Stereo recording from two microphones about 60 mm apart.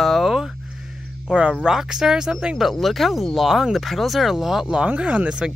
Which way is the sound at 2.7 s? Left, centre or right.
Centre.